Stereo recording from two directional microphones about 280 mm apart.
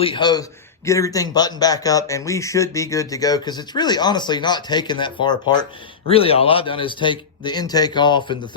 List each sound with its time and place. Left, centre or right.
0.0 s speech: centre